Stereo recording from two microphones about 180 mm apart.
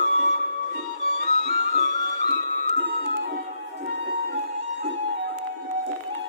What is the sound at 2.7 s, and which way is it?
Music, 70° right (ahead or behind).